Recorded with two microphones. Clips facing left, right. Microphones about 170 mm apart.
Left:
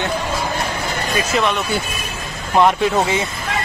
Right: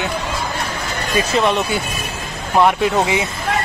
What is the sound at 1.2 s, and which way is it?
Speech, 30° right (ahead or behind).